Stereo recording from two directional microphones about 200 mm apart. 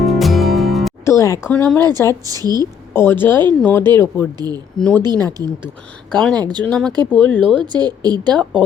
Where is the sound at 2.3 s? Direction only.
20° right (ahead or behind).